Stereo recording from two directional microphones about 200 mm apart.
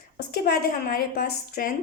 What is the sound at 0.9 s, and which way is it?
Speech, 50° left (ahead or behind).